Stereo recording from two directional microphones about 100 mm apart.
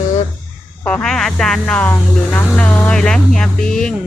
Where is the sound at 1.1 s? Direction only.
5° left (ahead or behind).